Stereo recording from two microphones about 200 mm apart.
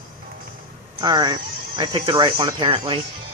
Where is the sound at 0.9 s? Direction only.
20° right (ahead or behind).